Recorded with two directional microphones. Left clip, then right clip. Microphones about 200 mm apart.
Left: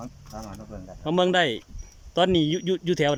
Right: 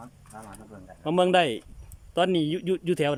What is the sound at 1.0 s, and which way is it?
Speech, 5° right (ahead or behind).